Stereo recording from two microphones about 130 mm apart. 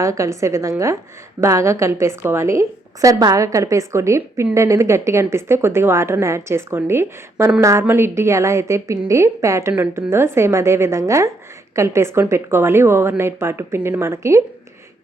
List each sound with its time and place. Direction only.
0.0 s a woman's voice: 25° right (ahead or behind)